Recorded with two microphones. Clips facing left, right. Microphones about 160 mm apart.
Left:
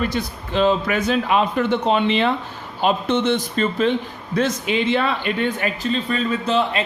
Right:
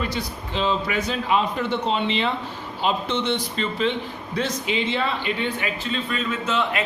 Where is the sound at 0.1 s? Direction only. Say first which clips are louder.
Left 4 dB; 55° left (ahead or behind).